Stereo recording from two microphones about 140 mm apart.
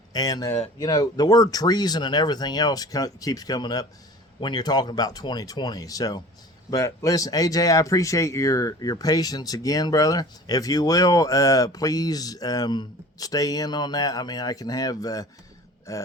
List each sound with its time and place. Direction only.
0.1 s speech: 25° left (ahead or behind)